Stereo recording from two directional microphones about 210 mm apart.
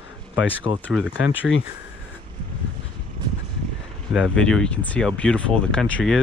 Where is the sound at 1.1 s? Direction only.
65° left (ahead or behind).